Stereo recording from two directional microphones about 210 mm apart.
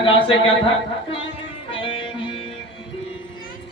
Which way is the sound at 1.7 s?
25° left (ahead or behind).